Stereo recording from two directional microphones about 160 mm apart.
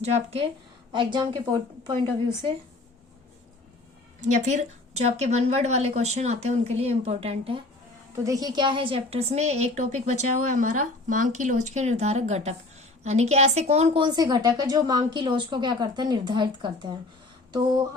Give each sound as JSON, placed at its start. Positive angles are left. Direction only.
{"t": 0.0, "sound": "speech", "side_deg": -40}
{"t": 0.9, "sound": "a woman's voice", "side_deg": -30}
{"t": 4.2, "sound": "a woman's voice", "side_deg": -50}
{"t": 8.1, "sound": "a woman's voice", "side_deg": -20}